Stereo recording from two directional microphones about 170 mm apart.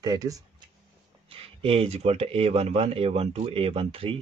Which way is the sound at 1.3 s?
35° right (ahead or behind).